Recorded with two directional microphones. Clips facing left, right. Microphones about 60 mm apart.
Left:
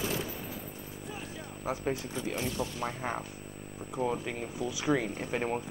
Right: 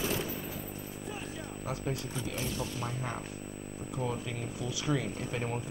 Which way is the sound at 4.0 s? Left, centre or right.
Centre.